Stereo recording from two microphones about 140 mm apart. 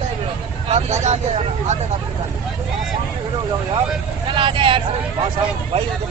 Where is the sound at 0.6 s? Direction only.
50° right (ahead or behind).